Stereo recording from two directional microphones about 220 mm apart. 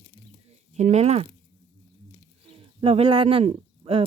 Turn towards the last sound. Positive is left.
turn(degrees=-25)  # may be behind; listen again after turning